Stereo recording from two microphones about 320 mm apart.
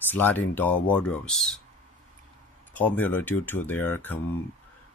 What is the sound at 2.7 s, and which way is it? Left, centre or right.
Speech, centre.